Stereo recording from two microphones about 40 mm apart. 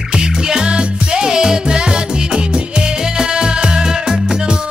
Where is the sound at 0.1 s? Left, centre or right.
Centre.